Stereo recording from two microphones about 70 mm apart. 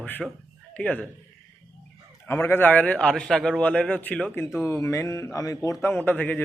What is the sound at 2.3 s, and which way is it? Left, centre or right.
A man's voice, left.